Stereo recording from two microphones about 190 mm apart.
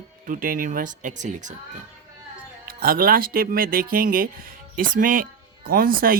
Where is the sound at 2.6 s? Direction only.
50° right (ahead or behind).